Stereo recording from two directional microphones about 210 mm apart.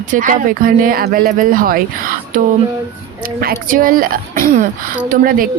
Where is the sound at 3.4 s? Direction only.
45° right (ahead or behind).